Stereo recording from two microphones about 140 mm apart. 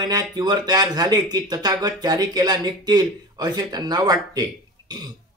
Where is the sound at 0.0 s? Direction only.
30° right (ahead or behind).